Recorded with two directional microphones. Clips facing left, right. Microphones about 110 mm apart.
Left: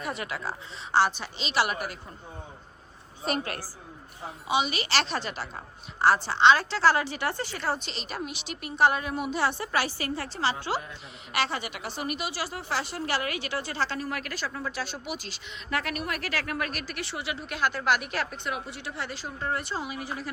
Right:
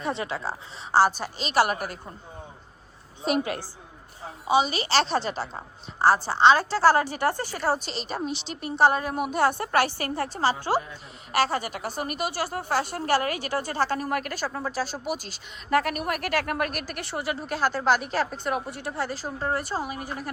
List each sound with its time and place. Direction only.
0.0 s a woman's voice: 30° right (ahead or behind)
3.4 s a woman's voice: 20° right (ahead or behind)
4.4 s a woman's voice: 35° right (ahead or behind)
8.0 s a woman's voice: 30° right (ahead or behind)
14.5 s a woman's voice: 35° right (ahead or behind)